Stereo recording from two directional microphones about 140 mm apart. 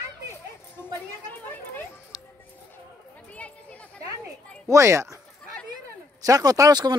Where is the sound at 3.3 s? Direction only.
10° left (ahead or behind).